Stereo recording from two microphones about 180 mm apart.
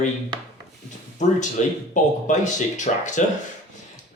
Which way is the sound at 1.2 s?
40° left (ahead or behind).